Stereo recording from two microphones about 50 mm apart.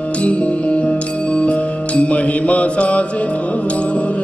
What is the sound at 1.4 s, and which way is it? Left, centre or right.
Mantra, left.